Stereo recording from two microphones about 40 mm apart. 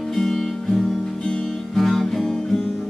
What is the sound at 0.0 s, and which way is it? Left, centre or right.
Music, centre.